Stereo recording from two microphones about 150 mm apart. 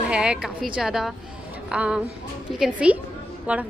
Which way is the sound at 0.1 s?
5° right (ahead or behind).